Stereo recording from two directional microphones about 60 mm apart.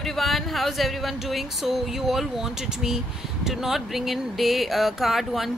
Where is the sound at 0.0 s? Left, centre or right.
Centre.